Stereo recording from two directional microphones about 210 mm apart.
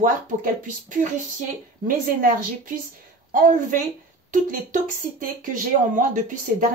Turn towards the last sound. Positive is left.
turn(degrees=-40)  # may be behind; listen again after turning